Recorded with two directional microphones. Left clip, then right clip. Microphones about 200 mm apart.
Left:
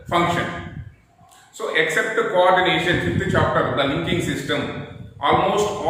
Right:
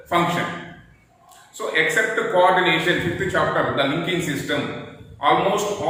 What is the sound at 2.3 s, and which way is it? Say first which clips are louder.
A man's voice: even; 10° left (ahead or behind).